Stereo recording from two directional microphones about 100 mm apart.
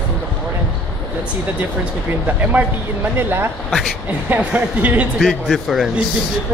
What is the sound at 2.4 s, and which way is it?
Speech, 15° right (ahead or behind).